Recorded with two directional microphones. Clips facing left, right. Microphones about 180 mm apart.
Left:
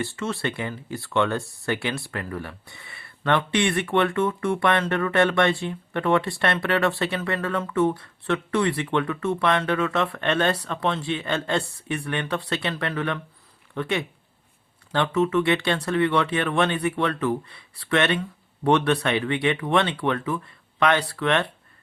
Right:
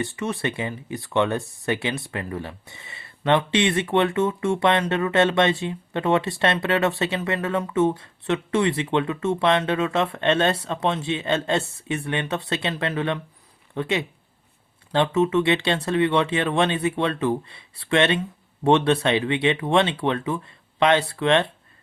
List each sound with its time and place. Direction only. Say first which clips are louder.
0.0 s speech: right 1 dB; 15° right (ahead or behind)